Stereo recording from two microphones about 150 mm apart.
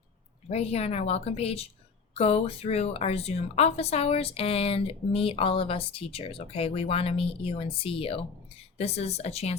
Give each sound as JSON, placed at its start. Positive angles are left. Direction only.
{"t": 0.4, "sound": "a woman's voice", "side_deg": 45}